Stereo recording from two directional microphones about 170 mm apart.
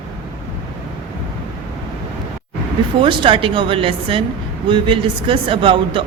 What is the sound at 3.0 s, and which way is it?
A woman's voice, 30° right (ahead or behind).